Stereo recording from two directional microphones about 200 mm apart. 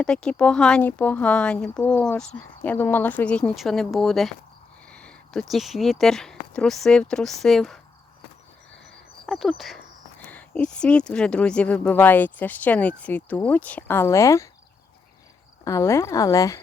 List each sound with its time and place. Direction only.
0.0 s speech: 5° left (ahead or behind)
9.2 s speech: centre (ahead or behind)
15.6 s speech: 15° left (ahead or behind)